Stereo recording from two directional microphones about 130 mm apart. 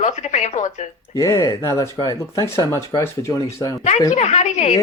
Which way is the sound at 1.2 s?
25° left (ahead or behind).